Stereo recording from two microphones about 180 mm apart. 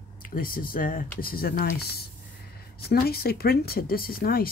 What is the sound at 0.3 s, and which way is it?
Speech, 50° left (ahead or behind).